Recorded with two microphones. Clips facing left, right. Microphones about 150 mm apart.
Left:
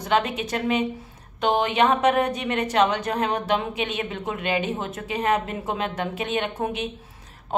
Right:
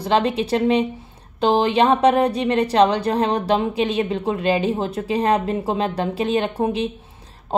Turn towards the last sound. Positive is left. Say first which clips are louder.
# right 6 dB
turn(degrees=-30)  # may be behind; listen again after turning